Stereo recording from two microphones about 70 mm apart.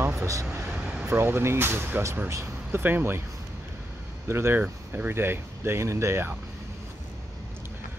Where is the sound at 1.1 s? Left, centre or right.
Right.